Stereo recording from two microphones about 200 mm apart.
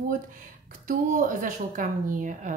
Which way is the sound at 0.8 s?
40° right (ahead or behind).